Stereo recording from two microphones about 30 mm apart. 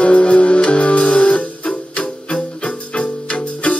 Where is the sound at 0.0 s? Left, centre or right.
Left.